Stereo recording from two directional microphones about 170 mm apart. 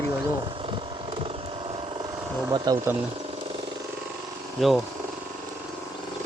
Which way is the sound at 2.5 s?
25° right (ahead or behind).